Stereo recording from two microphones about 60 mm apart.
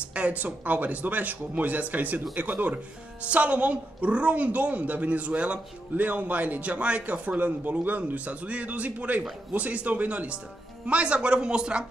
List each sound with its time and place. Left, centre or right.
0.1 s a woman's voice: right